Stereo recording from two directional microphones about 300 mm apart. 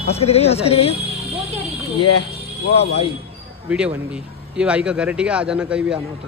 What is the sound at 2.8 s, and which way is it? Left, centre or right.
Speech, centre.